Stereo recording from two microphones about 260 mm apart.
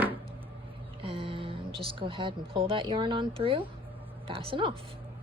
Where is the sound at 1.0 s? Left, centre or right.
Right.